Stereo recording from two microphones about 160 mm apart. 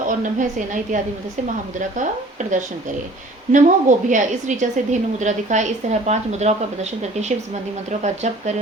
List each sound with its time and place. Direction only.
0.2 s a woman's voice: 55° right (ahead or behind)
2.0 s a woman's voice: 50° right (ahead or behind)
7.9 s a woman's voice: 45° right (ahead or behind)